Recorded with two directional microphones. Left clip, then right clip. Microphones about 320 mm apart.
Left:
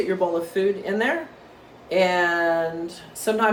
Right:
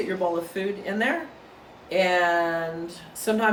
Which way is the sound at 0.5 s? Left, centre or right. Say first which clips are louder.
Left 6 dB; centre.